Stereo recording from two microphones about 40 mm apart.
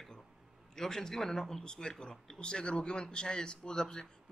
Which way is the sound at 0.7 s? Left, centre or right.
Centre.